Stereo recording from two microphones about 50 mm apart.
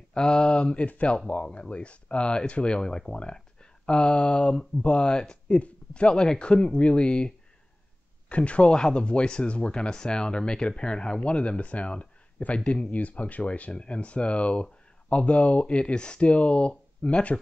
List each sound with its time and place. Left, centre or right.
0.1 s speech: centre